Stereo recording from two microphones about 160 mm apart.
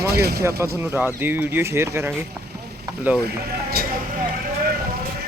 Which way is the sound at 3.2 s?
70° right (ahead or behind).